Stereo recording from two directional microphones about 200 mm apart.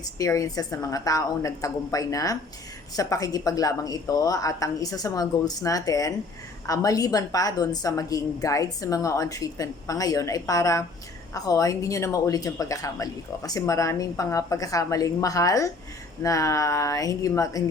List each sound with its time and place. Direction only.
0.2 s a woman's voice: 15° left (ahead or behind)